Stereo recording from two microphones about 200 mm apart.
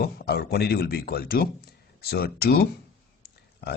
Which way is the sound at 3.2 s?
55° left (ahead or behind).